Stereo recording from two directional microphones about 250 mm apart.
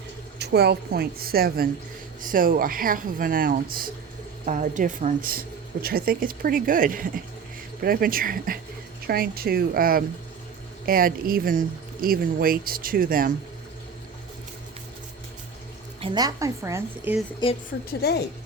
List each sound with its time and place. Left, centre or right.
0.3 s speech: right
16.0 s a woman's voice: centre
17.4 s a woman's voice: centre
18.0 s a woman's voice: left